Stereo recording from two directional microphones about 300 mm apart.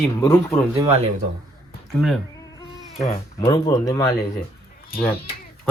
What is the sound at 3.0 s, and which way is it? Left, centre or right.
Speech, centre.